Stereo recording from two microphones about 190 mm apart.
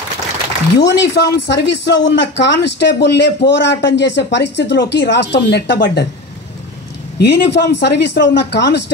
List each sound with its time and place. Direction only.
0.7 s speech: 65° left (ahead or behind)
7.2 s speech: 60° left (ahead or behind)